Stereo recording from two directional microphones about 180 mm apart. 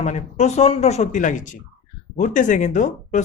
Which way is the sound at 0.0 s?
40° left (ahead or behind).